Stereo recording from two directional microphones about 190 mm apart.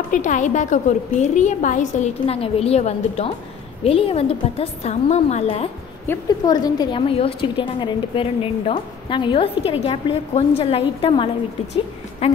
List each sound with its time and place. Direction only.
0.1 s a woman's voice: 40° left (ahead or behind)
6.0 s a woman's voice: 20° left (ahead or behind)